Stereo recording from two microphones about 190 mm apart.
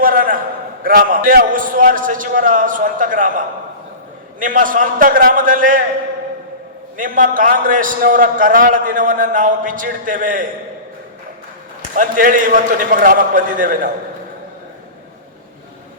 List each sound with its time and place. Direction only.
0.0 s a sound: 45° right (ahead or behind)
0.9 s a man's voice: 45° right (ahead or behind)
6.9 s a man's voice: 45° right (ahead or behind)
11.9 s a man's voice: 45° right (ahead or behind)